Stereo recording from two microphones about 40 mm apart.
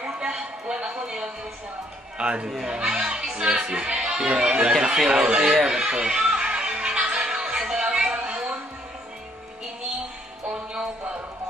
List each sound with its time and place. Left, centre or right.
0.2 s music: right
2.1 s a man's voice: right
5.2 s music: right
10.5 s music: centre